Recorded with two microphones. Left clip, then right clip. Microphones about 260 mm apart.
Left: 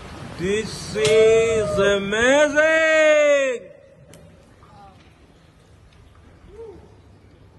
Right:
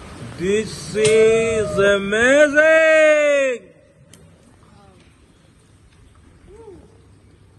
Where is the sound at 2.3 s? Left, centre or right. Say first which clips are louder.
Right 4 dB; centre.